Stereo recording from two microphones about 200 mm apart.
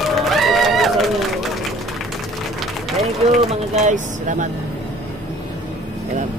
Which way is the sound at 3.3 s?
35° right (ahead or behind).